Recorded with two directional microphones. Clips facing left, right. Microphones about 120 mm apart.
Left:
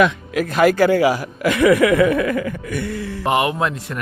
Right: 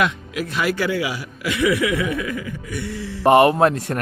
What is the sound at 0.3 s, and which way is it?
A man's voice, 45° left (ahead or behind).